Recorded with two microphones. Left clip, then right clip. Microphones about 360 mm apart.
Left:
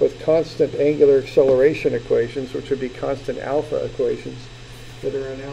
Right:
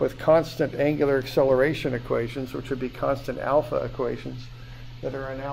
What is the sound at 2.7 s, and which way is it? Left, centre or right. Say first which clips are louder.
Speech: left 2 dB; right.